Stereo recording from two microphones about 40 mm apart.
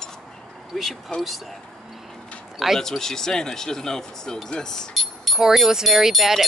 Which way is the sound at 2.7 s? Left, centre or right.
Centre.